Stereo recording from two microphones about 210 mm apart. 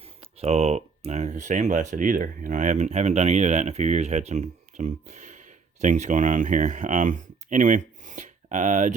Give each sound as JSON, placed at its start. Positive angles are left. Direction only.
{"t": 0.0, "sound": "speech", "side_deg": -30}